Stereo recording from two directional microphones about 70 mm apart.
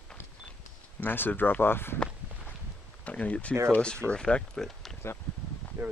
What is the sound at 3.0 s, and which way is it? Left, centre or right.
Speech, left.